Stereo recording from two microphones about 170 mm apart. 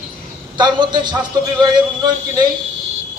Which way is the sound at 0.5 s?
25° right (ahead or behind).